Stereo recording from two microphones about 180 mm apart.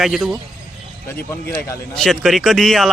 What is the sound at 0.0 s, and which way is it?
Speech, centre (ahead or behind).